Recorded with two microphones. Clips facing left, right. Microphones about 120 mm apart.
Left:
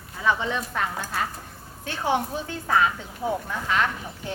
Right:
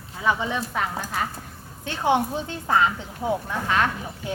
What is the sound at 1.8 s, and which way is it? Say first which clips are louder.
A woman's voice: right 3 dB; 20° right (ahead or behind).